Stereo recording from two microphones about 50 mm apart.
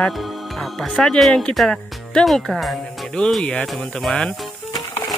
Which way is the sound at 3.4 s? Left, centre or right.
Left.